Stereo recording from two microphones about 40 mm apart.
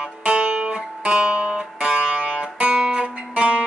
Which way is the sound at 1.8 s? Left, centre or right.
Right.